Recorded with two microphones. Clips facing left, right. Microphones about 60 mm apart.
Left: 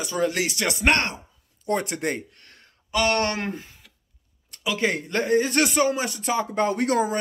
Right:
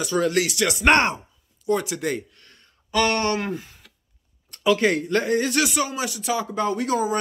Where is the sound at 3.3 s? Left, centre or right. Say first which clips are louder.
Right 3 dB; left.